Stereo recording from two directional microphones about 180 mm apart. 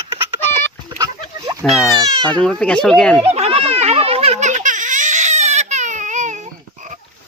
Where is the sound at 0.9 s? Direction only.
20° right (ahead or behind).